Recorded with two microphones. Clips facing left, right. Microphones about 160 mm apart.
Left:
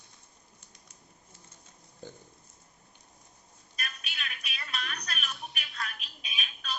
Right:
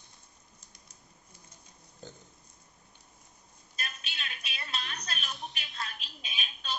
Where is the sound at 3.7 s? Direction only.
25° right (ahead or behind).